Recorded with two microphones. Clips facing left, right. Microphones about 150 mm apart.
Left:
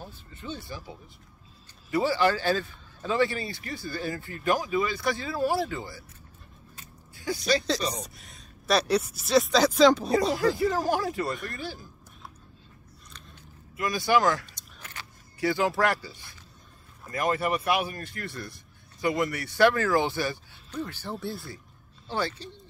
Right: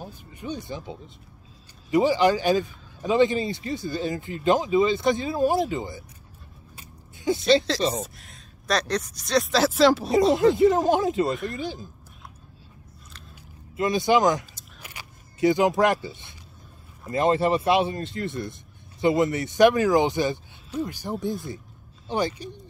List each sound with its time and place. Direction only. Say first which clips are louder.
0.0 s a man's voice: right 4 dB; 15° right (ahead or behind)
6.7 s a sound: right 3 dB; 15° right (ahead or behind)
8.0 s speech: right 5 dB; centre (ahead or behind)
10.3 s a man's voice: right 7 dB; 20° right (ahead or behind)
13.7 s a man's voice: right 4 dB; 20° right (ahead or behind)
14.5 s keys jangling: right 1 dB; 10° right (ahead or behind)
17.0 s a man's voice: right 6 dB; 25° right (ahead or behind)